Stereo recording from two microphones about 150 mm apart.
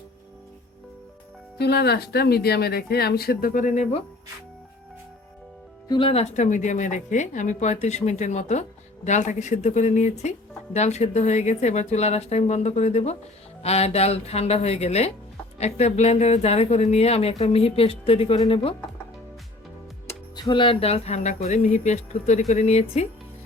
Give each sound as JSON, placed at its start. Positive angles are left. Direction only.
{"t": 1.5, "sound": "speech", "side_deg": 90}
{"t": 5.9, "sound": "speech", "side_deg": 35}
{"t": 20.3, "sound": "speech", "side_deg": 30}